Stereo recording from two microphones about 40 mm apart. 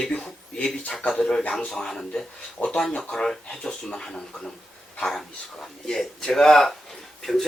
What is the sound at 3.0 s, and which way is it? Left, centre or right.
Speech, centre.